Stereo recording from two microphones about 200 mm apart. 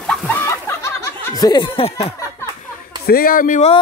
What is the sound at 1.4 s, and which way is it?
Speech, 20° left (ahead or behind).